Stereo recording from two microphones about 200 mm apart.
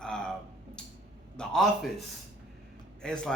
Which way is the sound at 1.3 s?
5° left (ahead or behind).